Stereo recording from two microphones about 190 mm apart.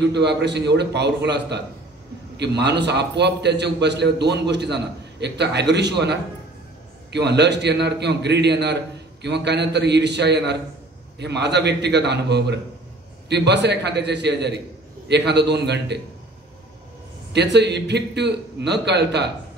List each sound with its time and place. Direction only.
0.0 s a man's voice: 65° right (ahead or behind)
17.3 s a man's voice: 65° right (ahead or behind)